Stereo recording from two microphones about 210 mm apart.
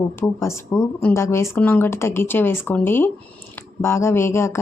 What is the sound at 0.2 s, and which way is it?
Speech, 15° left (ahead or behind).